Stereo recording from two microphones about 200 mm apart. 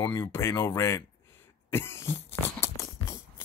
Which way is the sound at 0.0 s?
20° left (ahead or behind).